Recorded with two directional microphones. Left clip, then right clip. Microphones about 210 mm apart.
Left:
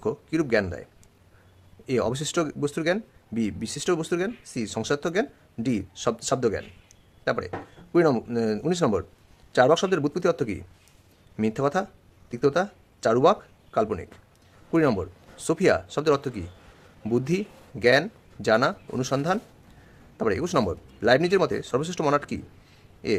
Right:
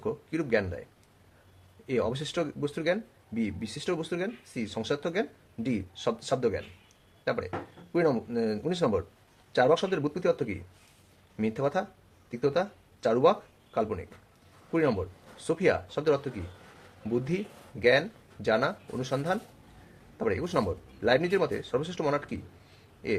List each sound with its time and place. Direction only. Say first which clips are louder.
0.0 s speech: left 6 dB; 40° left (ahead or behind)
1.9 s speech: left 4 dB; 40° left (ahead or behind)